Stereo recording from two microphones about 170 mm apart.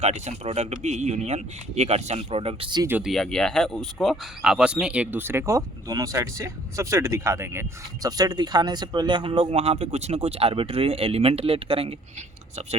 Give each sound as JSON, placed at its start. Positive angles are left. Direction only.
{"t": 0.0, "sound": "speech", "side_deg": -40}
{"t": 3.0, "sound": "speech", "side_deg": 0}